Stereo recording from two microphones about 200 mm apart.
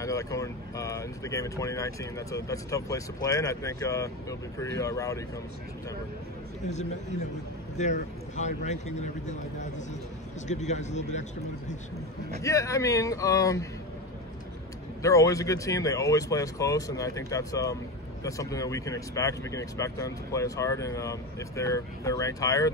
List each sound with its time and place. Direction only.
0.0 s speech: 15° left (ahead or behind)
6.7 s a man's voice: 35° left (ahead or behind)
12.4 s speech: 15° left (ahead or behind)
15.0 s speech: 15° left (ahead or behind)